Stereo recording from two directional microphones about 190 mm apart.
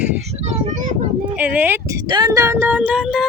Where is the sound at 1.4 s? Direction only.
10° right (ahead or behind).